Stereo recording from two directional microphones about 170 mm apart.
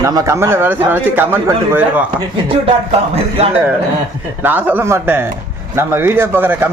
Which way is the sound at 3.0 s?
35° right (ahead or behind).